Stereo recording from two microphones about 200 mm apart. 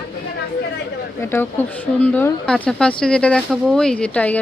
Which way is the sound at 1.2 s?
10° left (ahead or behind).